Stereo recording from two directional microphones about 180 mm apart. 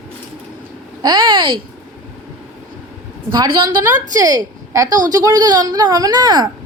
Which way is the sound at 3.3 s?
25° right (ahead or behind).